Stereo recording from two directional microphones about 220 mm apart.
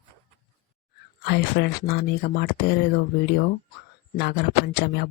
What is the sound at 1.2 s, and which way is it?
Speech, 45° left (ahead or behind).